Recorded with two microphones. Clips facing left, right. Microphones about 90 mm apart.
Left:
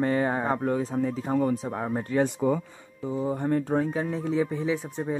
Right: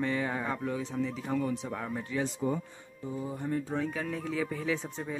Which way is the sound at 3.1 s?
70° left (ahead or behind).